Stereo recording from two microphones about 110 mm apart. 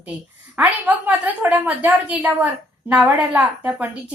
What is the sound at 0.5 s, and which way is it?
A woman's voice, 15° right (ahead or behind).